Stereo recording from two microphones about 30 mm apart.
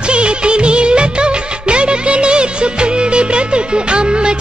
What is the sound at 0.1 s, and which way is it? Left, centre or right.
Music of bollywood, right.